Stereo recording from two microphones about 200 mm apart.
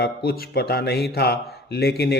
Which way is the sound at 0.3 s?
50° left (ahead or behind).